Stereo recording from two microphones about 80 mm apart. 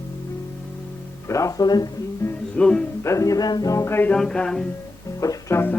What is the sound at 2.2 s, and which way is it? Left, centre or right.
Music, left.